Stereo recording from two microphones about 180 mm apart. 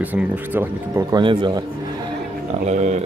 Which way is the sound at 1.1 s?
25° right (ahead or behind).